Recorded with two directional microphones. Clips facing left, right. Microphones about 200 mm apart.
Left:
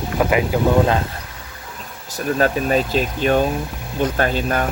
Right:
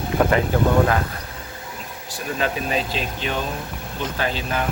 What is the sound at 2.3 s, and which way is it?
Speech, 45° left (ahead or behind).